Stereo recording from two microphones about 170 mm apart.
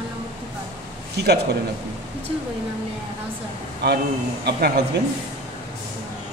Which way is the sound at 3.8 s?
75° right (ahead or behind).